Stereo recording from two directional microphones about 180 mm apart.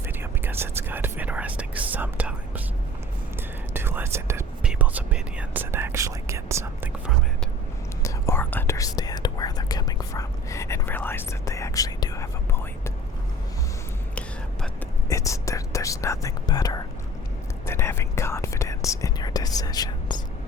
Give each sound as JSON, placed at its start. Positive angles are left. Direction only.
{"t": 0.2, "sound": "speech", "side_deg": -10}
{"t": 3.8, "sound": "speech", "side_deg": -10}
{"t": 8.0, "sound": "speech", "side_deg": 15}
{"t": 15.1, "sound": "speech", "side_deg": 15}